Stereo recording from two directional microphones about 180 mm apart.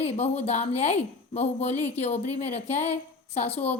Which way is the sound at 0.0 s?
35° left (ahead or behind).